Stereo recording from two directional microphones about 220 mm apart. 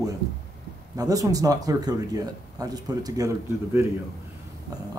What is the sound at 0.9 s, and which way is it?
Speech, 15° right (ahead or behind).